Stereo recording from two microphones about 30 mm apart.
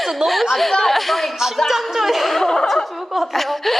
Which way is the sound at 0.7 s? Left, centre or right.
Centre.